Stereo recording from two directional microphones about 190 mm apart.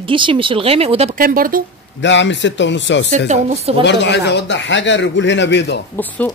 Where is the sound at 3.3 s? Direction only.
35° right (ahead or behind).